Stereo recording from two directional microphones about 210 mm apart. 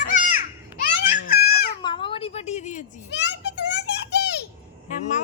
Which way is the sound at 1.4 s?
50° left (ahead or behind).